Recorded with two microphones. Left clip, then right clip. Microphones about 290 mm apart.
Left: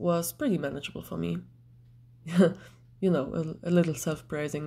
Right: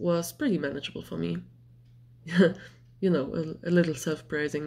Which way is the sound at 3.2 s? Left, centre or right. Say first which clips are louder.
Even; left.